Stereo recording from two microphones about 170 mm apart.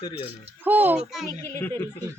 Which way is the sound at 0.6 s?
10° right (ahead or behind).